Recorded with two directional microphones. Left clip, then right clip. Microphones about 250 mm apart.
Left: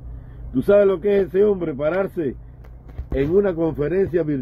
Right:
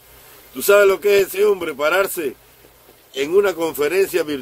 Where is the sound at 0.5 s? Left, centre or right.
Centre.